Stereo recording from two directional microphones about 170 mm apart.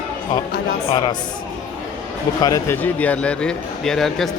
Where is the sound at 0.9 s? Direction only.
25° left (ahead or behind).